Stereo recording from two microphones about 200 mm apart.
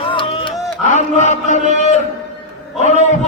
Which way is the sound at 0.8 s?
35° left (ahead or behind).